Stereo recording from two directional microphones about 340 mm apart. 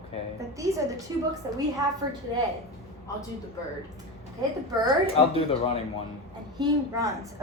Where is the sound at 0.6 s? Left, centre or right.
Centre.